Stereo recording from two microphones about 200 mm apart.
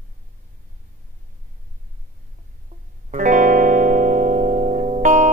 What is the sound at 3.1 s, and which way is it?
Music, 40° right (ahead or behind).